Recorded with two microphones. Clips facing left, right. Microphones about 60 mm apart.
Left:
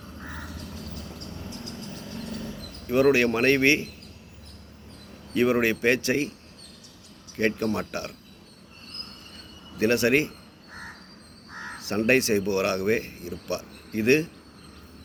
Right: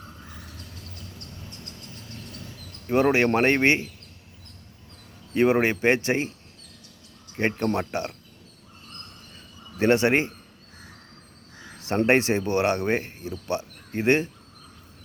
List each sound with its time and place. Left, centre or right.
2.8 s speech: right
5.3 s speech: right
7.3 s speech: right
9.7 s speech: right
11.5 s crow: left
11.8 s speech: right